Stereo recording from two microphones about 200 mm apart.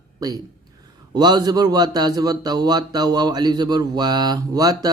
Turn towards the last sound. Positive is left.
turn(degrees=-20)  # may be behind; listen again after turning